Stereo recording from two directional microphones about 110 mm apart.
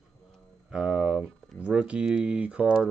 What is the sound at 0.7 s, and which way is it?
Music, 5° right (ahead or behind).